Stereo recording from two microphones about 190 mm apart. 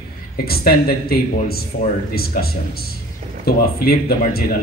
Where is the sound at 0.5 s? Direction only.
55° left (ahead or behind).